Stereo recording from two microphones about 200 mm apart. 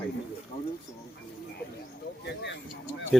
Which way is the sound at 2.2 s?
60° left (ahead or behind).